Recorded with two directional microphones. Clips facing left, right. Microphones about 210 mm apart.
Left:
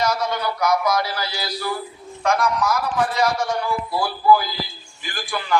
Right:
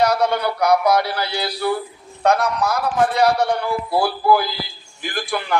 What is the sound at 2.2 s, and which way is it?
A man's voice, 65° right (ahead or behind).